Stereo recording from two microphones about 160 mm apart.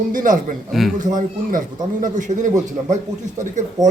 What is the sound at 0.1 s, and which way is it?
Speech, 55° right (ahead or behind).